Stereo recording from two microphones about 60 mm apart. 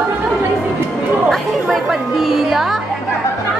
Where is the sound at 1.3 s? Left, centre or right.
Centre.